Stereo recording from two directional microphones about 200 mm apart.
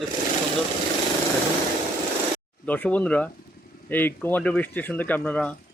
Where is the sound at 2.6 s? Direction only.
5° left (ahead or behind).